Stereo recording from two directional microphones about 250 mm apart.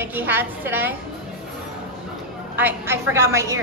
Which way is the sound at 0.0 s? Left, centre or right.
Centre.